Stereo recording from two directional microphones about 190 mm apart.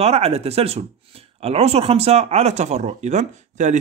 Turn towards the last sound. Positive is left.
turn(degrees=-40)  # may be behind; listen again after turning